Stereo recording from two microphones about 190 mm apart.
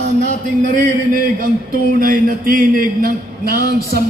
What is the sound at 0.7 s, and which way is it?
A man's voice, 50° right (ahead or behind).